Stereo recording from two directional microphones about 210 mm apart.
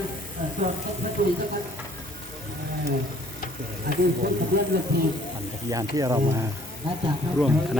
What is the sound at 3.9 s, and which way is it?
Speech, 50° right (ahead or behind).